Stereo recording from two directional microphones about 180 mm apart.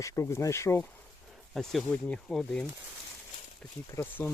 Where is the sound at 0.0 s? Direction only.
15° left (ahead or behind).